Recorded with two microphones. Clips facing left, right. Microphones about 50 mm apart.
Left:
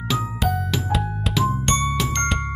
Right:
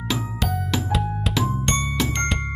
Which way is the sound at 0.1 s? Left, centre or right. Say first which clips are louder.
Left 3 dB; centre.